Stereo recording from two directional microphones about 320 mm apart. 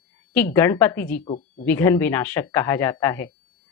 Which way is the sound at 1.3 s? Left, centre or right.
Left.